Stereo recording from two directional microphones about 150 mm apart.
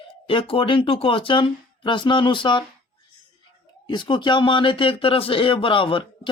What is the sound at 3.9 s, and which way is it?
Speech, 30° left (ahead or behind).